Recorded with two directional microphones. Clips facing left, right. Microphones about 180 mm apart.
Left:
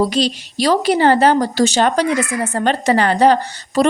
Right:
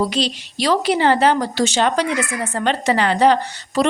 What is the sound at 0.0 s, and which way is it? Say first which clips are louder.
A woman's voice: left 4 dB; 40° left (ahead or behind).